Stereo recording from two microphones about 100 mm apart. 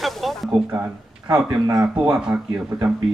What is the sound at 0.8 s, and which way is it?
Speech, 15° right (ahead or behind).